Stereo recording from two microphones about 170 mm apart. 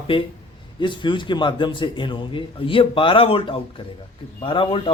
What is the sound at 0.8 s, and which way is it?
A man's voice, 30° left (ahead or behind).